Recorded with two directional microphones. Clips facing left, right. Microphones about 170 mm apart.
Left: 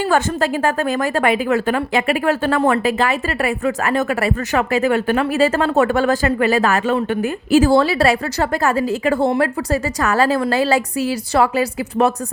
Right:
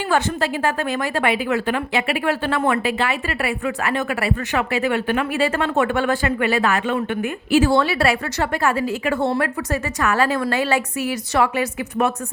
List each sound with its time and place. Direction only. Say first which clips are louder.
0.0 s a woman's voice: left 3 dB; 45° left (ahead or behind)